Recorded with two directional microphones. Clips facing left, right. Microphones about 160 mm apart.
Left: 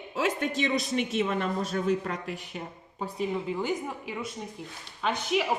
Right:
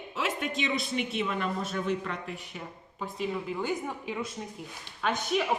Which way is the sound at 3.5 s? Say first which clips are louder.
Left 1 dB; 10° left (ahead or behind).